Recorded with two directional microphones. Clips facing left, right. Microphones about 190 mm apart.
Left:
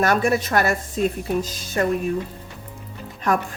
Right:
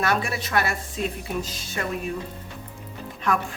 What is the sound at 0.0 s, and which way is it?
A woman's voice, 45° left (ahead or behind).